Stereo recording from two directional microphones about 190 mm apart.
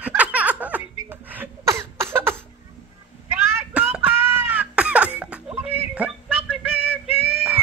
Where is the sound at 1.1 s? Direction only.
10° right (ahead or behind).